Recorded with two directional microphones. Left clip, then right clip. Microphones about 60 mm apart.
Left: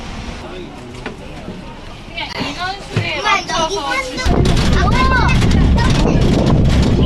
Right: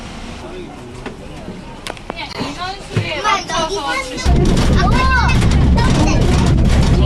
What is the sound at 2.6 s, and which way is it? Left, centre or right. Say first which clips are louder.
Music: left 2 dB; centre.